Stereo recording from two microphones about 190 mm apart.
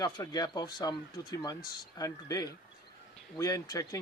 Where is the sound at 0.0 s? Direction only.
20° left (ahead or behind).